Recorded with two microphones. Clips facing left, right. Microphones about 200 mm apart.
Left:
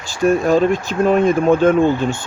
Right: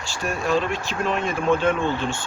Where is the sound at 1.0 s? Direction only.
45° left (ahead or behind).